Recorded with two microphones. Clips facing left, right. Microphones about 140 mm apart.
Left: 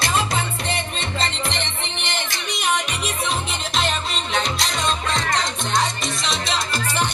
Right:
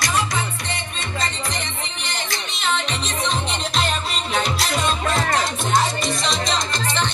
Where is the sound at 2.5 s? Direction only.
15° left (ahead or behind).